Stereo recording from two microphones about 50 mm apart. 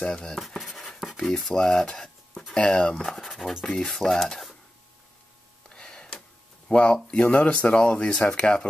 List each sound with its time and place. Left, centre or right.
0.0 s speech: centre
3.2 s speech: centre
3.6 s speech: centre
5.7 s a sound: centre
6.7 s speech: centre